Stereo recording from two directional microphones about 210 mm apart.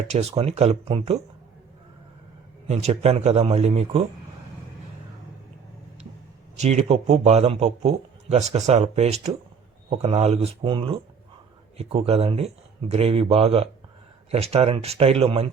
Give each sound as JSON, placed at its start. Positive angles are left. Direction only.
{"t": 0.1, "sound": "speech", "side_deg": -30}
{"t": 2.6, "sound": "speech", "side_deg": -30}
{"t": 6.6, "sound": "a man's voice", "side_deg": -30}